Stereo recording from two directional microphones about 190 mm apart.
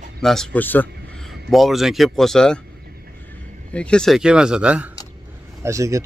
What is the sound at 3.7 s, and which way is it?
Speech, 5° left (ahead or behind).